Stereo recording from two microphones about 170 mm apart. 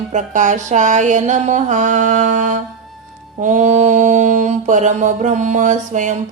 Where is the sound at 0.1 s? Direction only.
45° right (ahead or behind).